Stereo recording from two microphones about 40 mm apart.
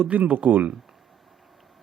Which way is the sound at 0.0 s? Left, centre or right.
Right.